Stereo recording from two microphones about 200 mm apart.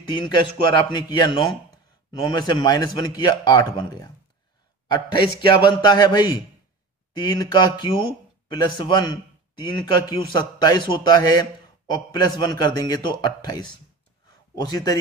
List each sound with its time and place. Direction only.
0.0 s speech: 25° left (ahead or behind)